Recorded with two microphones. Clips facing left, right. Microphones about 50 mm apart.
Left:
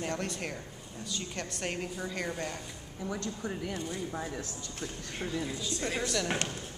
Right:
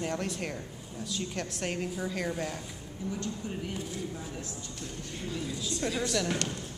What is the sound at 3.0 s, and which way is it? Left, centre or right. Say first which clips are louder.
Speech: even; left.